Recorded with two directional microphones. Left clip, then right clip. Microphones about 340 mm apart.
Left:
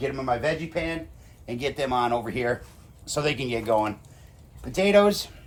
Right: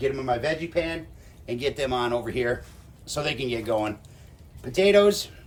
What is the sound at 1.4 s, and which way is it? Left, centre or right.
Speech, centre.